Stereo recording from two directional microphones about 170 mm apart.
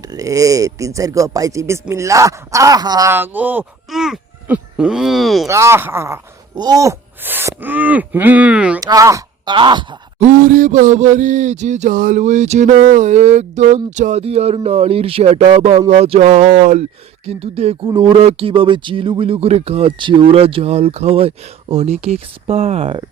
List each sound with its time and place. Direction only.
0.1 s speech: 20° right (ahead or behind); by 5.5 s centre (ahead or behind)
5.5 s speech: 15° right (ahead or behind)
8.8 s speech: 20° right (ahead or behind)
10.2 s a sound: 50° right (ahead or behind)
17.2 s speech: 35° right (ahead or behind)